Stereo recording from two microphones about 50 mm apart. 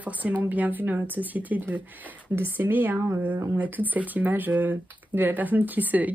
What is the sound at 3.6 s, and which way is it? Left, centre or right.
Speech, right.